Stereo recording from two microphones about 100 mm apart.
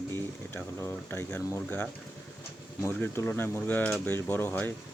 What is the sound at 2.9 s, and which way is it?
Speech, 20° left (ahead or behind).